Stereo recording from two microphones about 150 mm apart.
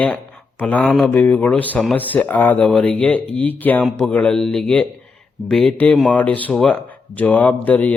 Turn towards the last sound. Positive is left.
turn(degrees=10)  # may be behind; listen again after turning